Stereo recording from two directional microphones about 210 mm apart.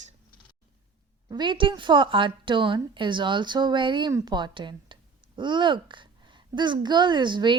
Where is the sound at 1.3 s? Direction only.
20° right (ahead or behind).